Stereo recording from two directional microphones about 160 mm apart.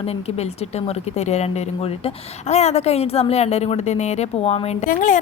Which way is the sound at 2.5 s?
45° left (ahead or behind).